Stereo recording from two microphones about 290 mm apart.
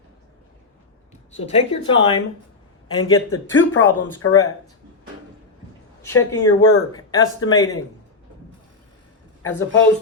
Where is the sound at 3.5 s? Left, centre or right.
Left.